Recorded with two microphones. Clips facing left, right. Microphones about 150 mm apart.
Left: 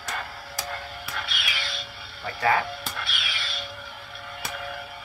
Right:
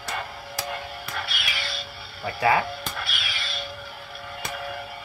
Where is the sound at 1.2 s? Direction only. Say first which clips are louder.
Right 1 dB; centre (ahead or behind).